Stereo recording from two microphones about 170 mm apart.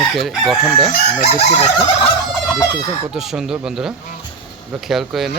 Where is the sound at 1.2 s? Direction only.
40° left (ahead or behind).